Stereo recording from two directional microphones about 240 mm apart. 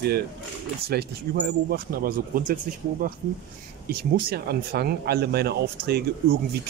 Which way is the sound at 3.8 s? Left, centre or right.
Right.